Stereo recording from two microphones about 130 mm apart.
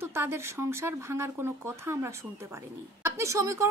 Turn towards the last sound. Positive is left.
turn(degrees=-20)  # may be behind; listen again after turning